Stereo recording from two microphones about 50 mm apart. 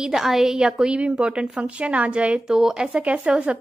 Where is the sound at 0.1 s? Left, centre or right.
Centre; by 2.4 s right.